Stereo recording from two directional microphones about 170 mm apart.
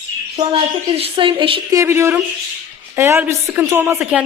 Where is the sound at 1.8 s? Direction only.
15° right (ahead or behind).